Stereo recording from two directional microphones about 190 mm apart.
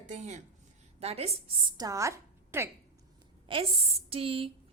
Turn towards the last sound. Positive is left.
turn(degrees=-30)  # may be behind; listen again after turning